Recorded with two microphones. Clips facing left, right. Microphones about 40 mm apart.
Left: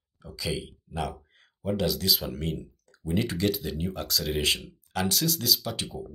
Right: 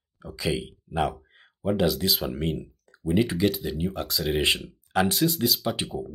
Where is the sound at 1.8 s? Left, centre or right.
Centre.